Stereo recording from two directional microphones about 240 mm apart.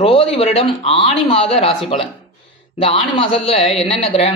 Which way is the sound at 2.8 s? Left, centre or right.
Left.